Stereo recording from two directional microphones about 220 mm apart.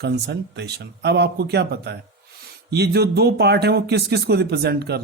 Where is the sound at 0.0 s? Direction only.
50° right (ahead or behind).